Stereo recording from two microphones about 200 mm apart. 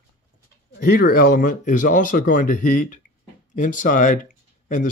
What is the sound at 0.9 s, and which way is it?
Speech, 50° left (ahead or behind).